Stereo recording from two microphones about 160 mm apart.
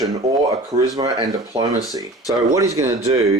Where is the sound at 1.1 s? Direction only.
35° right (ahead or behind).